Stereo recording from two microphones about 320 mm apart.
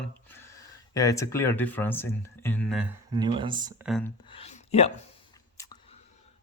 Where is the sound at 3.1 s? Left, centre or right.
Centre.